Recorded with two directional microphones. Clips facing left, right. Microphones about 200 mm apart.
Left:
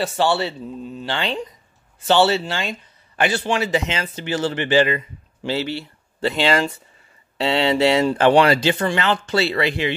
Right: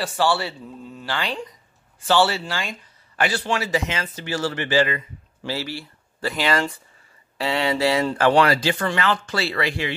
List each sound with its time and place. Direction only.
0.0 s speech: 25° left (ahead or behind)